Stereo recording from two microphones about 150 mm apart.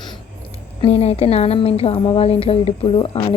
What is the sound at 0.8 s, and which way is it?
Speech, 45° left (ahead or behind).